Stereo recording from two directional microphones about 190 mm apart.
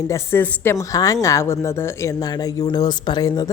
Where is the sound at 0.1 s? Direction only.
10° left (ahead or behind).